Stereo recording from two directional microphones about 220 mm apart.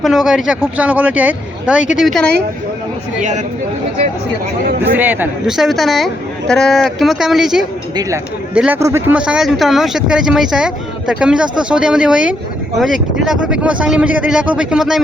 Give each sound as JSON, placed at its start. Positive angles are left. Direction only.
{"t": 0.0, "sound": "speech", "side_deg": 0}
{"t": 3.2, "sound": "speech", "side_deg": -35}
{"t": 4.8, "sound": "speech", "side_deg": -10}